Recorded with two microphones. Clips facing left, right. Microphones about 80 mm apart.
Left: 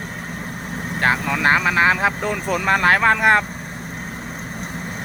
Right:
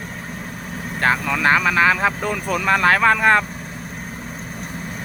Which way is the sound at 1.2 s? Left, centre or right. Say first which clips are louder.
Even; left.